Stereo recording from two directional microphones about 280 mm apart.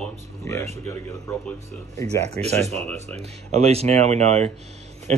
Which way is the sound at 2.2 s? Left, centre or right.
Right.